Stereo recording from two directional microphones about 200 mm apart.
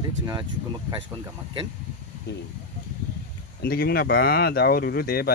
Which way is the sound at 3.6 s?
50° left (ahead or behind).